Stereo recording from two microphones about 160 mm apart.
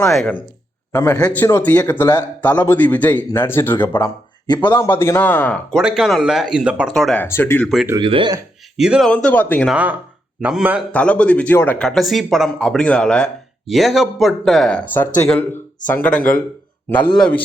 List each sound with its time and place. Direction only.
0.9 s speech: 15° left (ahead or behind)
4.0 s speech: 25° left (ahead or behind)
4.9 s speech: 15° left (ahead or behind)
5.7 s speech: 5° right (ahead or behind); by 7.7 s 15° left (ahead or behind)
8.0 s speech: 30° right (ahead or behind)
8.7 s speech: 5° right (ahead or behind)
9.6 s a man's voice: 10° right (ahead or behind)
10.9 s speech: 10° left (ahead or behind)